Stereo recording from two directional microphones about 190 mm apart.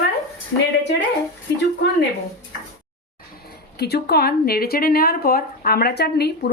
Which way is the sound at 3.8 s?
55° left (ahead or behind).